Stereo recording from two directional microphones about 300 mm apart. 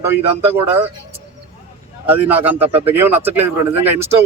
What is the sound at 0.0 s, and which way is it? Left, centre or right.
Speech, centre.